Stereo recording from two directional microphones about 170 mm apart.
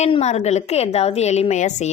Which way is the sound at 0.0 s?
40° left (ahead or behind).